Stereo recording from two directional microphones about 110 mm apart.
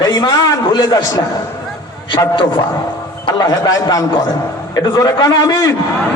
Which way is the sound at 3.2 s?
35° left (ahead or behind).